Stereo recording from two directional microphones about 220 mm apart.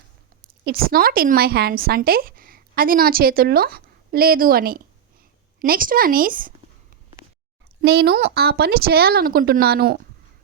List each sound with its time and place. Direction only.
0.6 s a woman's voice: 45° right (ahead or behind)
7.8 s speech: 45° right (ahead or behind)